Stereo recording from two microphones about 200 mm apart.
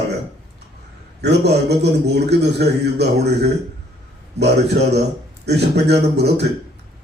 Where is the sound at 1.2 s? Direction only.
55° right (ahead or behind).